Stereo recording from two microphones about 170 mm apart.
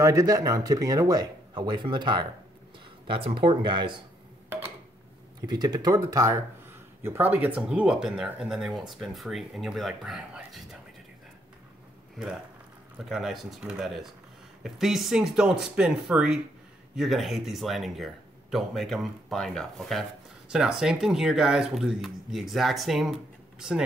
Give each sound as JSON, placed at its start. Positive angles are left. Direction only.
{"t": 0.0, "sound": "speech", "side_deg": -20}
{"t": 5.5, "sound": "speech", "side_deg": -25}
{"t": 13.1, "sound": "speech", "side_deg": 0}